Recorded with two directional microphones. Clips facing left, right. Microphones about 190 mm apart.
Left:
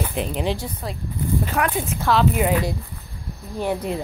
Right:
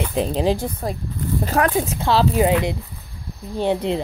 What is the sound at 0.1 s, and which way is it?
Speech, 30° right (ahead or behind).